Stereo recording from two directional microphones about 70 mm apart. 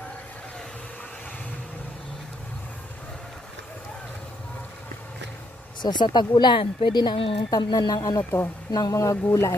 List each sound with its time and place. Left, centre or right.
5.8 s speech: left
8.2 s speech: left
8.7 s speech: left